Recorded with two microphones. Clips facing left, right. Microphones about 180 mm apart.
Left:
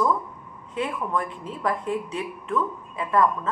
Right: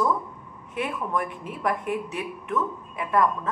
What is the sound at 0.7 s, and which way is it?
Speech, 15° right (ahead or behind).